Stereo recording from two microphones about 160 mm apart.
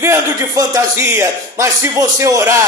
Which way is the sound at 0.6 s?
20° right (ahead or behind).